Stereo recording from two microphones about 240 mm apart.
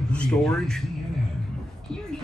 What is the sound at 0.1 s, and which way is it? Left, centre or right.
Speech, centre.